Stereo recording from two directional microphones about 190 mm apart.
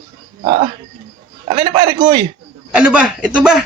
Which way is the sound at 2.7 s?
5° right (ahead or behind).